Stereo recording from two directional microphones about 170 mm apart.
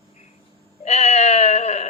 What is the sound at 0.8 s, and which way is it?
A woman's voice, 40° left (ahead or behind).